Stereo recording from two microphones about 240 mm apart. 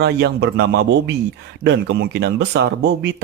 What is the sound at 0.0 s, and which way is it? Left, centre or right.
Speech, right.